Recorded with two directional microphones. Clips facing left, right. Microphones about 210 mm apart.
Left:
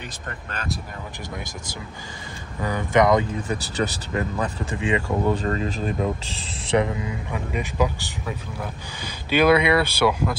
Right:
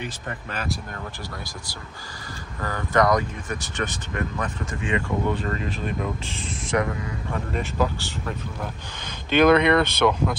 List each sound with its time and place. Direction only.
2.6 s speech: 20° left (ahead or behind); by 5.9 s 35° left (ahead or behind)
6.8 s speech: 20° left (ahead or behind)
7.3 s speech: 10° left (ahead or behind)